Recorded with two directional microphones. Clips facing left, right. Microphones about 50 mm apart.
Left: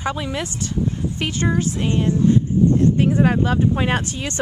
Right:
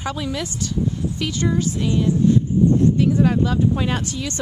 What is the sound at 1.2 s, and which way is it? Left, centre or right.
Speech, left.